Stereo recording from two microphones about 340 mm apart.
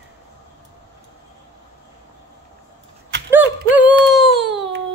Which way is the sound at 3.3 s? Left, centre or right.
Centre.